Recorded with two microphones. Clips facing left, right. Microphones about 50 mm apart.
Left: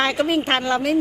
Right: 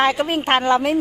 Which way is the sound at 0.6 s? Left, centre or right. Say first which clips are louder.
Right 4 dB; right.